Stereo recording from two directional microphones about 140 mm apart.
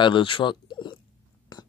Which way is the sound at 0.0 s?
35° left (ahead or behind).